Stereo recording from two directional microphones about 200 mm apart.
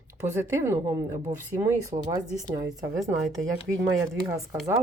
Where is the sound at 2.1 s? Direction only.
15° right (ahead or behind).